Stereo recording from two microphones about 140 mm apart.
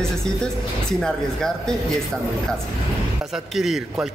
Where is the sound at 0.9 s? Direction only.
5° left (ahead or behind).